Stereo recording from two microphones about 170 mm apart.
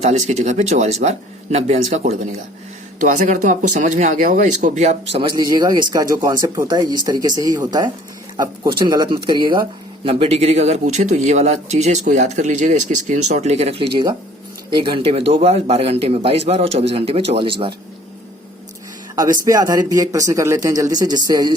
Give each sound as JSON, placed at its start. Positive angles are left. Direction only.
{"t": 0.0, "sound": "speech", "side_deg": -40}
{"t": 13.9, "sound": "speech", "side_deg": -25}
{"t": 19.1, "sound": "speech", "side_deg": -20}